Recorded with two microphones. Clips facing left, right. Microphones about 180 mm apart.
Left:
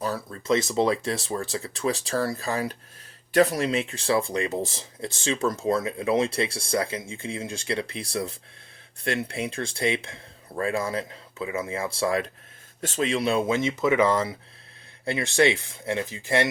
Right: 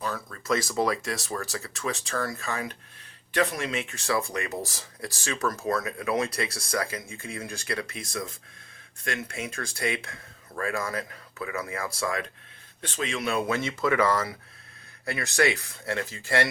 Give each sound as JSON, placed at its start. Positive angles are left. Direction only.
{"t": 0.3, "sound": "speech", "side_deg": 25}
{"t": 13.6, "sound": "speech", "side_deg": 20}